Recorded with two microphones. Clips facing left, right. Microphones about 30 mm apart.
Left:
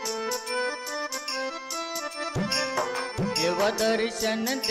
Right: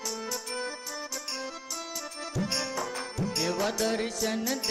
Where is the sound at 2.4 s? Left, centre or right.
Left.